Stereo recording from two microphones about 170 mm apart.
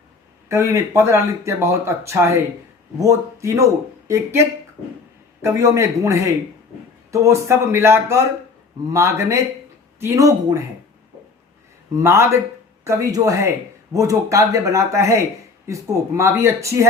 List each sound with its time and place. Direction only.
0.4 s a man's voice: 15° right (ahead or behind)
11.9 s a man's voice: 15° right (ahead or behind)